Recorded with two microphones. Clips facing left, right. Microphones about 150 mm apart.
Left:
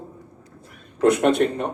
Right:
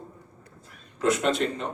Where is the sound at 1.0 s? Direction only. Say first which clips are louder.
Left 7 dB; 55° left (ahead or behind).